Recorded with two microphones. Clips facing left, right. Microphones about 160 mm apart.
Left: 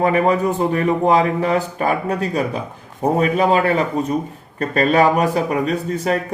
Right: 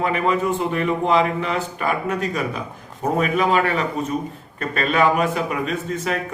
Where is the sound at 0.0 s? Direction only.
40° left (ahead or behind).